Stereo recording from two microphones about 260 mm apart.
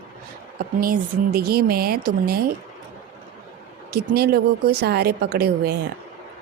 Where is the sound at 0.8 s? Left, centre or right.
Right.